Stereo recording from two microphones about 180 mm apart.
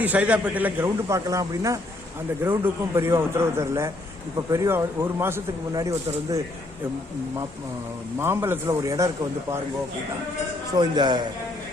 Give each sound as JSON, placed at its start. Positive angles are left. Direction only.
{"t": 0.0, "sound": "a man's voice", "side_deg": -10}
{"t": 8.2, "sound": "a man's voice", "side_deg": -15}
{"t": 10.8, "sound": "a man's voice", "side_deg": -25}